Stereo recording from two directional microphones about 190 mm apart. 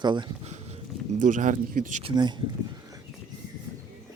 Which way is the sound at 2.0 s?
25° right (ahead or behind).